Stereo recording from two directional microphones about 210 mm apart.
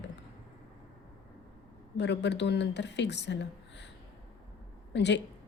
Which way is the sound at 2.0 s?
55° left (ahead or behind).